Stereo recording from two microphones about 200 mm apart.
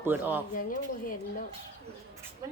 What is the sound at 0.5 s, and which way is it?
Speech, 45° left (ahead or behind).